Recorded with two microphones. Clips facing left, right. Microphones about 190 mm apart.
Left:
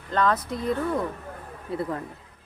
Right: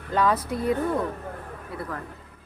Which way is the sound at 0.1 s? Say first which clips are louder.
Right 1 dB; 10° right (ahead or behind).